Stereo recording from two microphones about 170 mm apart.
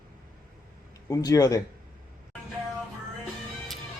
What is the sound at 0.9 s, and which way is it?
Speech, 20° left (ahead or behind).